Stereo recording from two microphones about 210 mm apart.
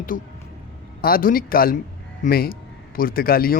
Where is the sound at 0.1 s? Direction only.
40° left (ahead or behind).